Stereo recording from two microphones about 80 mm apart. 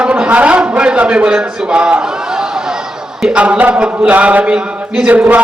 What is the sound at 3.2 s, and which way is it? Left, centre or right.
A man's voice, centre.